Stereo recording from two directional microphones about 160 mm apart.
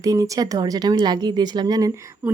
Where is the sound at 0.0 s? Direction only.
20° right (ahead or behind).